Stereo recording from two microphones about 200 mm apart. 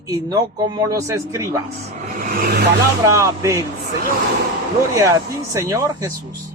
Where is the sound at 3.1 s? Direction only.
15° right (ahead or behind).